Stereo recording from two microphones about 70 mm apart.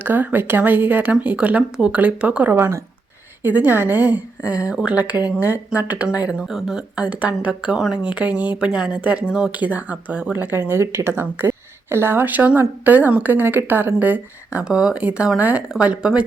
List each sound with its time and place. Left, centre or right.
0.0 s a woman's voice: right
2.6 s speech: right
3.4 s a woman's voice: right; by 6.8 s centre
6.9 s a woman's voice: centre
14.6 s speech: centre
15.4 s a woman's voice: right